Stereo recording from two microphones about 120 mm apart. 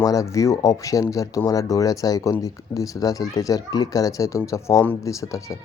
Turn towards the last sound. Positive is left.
turn(degrees=25)  # may be behind; listen again after turning